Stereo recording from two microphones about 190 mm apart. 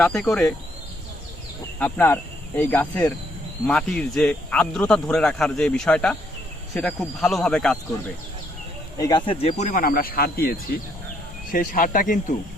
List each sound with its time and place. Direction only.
0.0 s speech: centre (ahead or behind)
1.8 s speech: 10° left (ahead or behind)
9.0 s speech: 20° left (ahead or behind); by 10.5 s 50° left (ahead or behind)
11.5 s speech: 45° left (ahead or behind)